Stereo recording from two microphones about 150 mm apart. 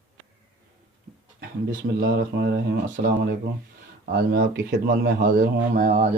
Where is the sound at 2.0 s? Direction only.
90° right.